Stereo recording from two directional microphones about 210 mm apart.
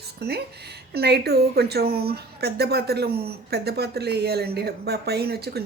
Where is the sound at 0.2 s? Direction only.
50° right (ahead or behind).